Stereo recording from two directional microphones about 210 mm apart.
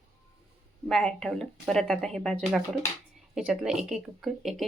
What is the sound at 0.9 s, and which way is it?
A woman's voice, centre (ahead or behind).